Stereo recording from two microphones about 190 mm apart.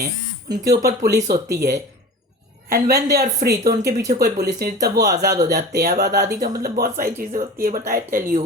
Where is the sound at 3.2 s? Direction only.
55° right (ahead or behind).